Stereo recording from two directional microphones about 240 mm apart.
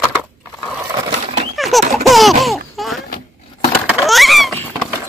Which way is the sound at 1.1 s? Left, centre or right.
Right.